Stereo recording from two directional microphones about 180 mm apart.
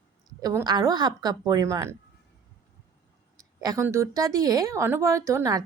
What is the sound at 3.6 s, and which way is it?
Speech, 15° right (ahead or behind).